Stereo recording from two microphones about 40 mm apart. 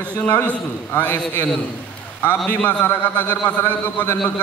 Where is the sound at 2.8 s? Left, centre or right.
Left.